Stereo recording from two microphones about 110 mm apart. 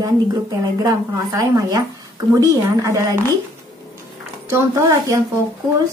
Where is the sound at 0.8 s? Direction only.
30° right (ahead or behind).